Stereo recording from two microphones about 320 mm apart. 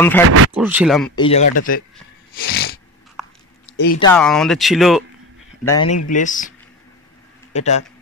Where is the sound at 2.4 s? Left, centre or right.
Left.